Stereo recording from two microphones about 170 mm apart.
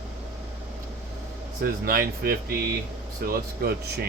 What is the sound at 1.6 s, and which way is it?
Speech, 60° right (ahead or behind).